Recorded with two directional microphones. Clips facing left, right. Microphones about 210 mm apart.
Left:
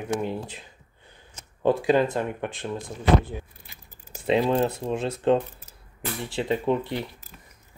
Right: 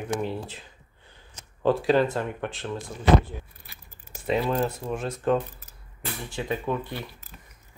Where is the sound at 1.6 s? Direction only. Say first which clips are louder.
Left 1 dB; 15° left (ahead or behind).